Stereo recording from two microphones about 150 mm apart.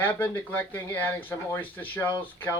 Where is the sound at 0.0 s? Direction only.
15° left (ahead or behind).